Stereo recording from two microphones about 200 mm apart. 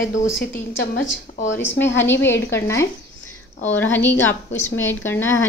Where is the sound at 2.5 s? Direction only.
15° left (ahead or behind).